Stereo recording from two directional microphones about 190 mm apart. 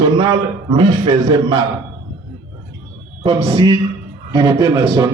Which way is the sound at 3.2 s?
25° right (ahead or behind).